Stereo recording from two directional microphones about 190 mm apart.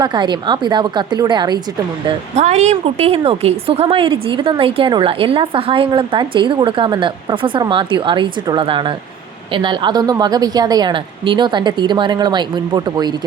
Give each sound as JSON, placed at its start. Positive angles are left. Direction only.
{"t": 0.0, "sound": "speech", "side_deg": -25}
{"t": 2.0, "sound": "speech", "side_deg": -35}